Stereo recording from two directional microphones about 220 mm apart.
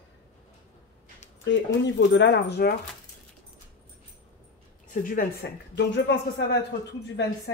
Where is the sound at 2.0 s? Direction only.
55° left (ahead or behind).